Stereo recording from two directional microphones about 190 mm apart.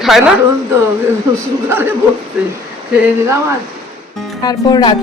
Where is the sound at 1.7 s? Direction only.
10° right (ahead or behind).